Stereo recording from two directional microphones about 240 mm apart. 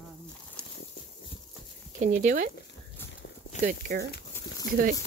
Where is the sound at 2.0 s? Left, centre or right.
Right.